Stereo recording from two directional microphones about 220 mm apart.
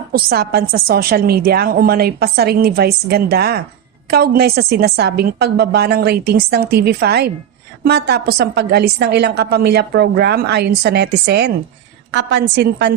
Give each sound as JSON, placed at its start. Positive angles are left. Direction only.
{"t": 0.1, "sound": "a woman's voice", "side_deg": -45}